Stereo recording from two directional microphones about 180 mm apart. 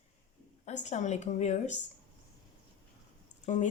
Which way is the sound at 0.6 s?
40° left (ahead or behind).